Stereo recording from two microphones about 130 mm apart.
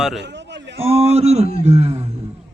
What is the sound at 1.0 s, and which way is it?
A man's voice, 55° right (ahead or behind).